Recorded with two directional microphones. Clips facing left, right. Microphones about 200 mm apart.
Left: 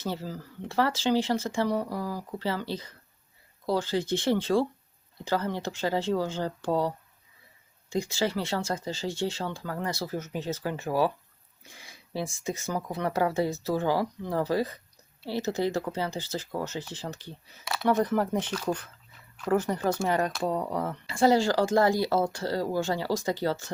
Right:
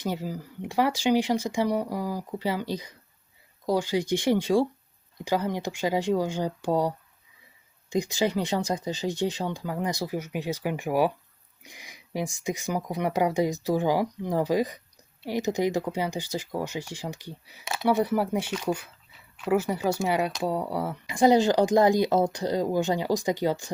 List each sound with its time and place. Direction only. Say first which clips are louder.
0.0 s speech: right 3 dB; 15° right (ahead or behind)